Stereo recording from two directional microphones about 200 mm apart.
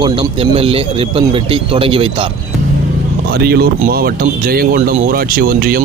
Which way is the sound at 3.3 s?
50° right (ahead or behind).